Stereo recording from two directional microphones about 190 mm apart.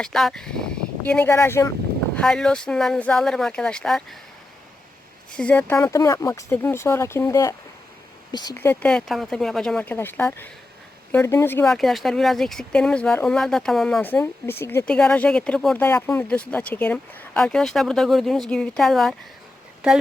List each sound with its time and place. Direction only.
0.0 s speech: centre (ahead or behind)
2.1 s speech: 5° left (ahead or behind)
5.3 s speech: 5° left (ahead or behind); by 8.5 s 20° left (ahead or behind)
8.5 s speech: 10° left (ahead or behind)